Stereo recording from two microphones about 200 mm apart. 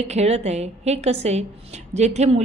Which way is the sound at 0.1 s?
35° right (ahead or behind).